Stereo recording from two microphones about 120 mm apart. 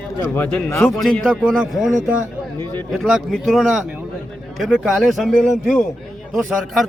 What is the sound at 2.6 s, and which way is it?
Speech, 15° left (ahead or behind).